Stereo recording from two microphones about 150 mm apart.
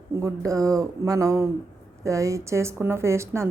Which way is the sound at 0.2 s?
20° right (ahead or behind).